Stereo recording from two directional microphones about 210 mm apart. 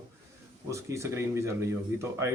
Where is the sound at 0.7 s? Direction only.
15° right (ahead or behind).